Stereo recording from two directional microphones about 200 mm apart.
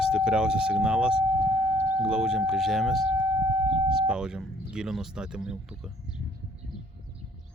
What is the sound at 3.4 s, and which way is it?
Civil defense siren, 20° right (ahead or behind).